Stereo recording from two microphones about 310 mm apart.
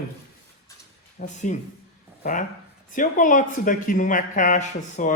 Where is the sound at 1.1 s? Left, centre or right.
Left.